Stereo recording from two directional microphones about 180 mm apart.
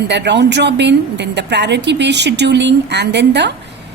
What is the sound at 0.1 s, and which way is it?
A woman's voice, 75° right (ahead or behind).